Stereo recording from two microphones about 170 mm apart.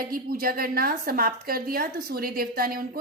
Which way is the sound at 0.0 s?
60° right (ahead or behind).